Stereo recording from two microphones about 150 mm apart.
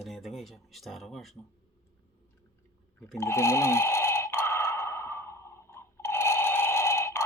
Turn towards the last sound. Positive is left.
turn(degrees=20)  # may be behind; listen again after turning